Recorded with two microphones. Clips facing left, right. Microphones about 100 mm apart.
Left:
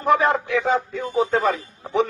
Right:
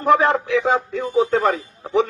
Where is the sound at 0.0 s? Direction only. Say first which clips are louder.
Right 2 dB; 70° right (ahead or behind).